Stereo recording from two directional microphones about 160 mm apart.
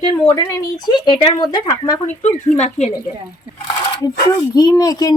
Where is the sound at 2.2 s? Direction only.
45° left (ahead or behind).